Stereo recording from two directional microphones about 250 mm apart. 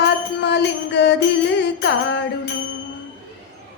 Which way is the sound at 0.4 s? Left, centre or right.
Left.